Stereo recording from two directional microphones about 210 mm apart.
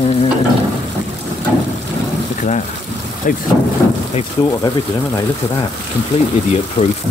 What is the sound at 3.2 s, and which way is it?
Speech, 40° left (ahead or behind).